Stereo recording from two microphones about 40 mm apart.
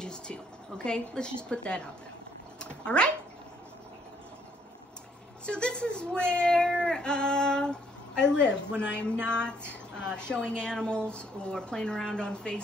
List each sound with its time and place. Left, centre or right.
0.0 s a sound: left
0.8 s speech: left
2.6 s cat: left
5.4 s speech: left